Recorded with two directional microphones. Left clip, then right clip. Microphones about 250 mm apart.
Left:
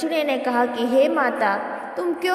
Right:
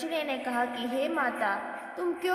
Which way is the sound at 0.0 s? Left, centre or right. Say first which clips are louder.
Left 10 dB; left.